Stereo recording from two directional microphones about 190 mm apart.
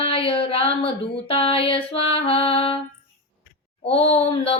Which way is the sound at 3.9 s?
30° left (ahead or behind).